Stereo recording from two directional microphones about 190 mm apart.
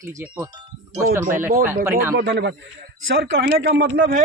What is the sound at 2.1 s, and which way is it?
Speech, 60° right (ahead or behind).